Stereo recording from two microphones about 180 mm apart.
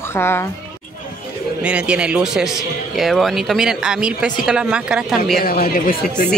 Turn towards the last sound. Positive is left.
turn(degrees=55)  # may be behind; listen again after turning